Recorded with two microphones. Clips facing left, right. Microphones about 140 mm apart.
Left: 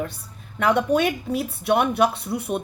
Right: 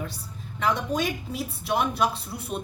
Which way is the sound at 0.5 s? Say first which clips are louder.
Left 6 dB; 65° left (ahead or behind).